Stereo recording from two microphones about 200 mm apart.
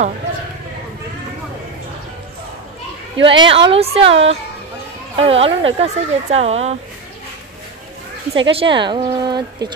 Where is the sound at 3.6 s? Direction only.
30° right (ahead or behind).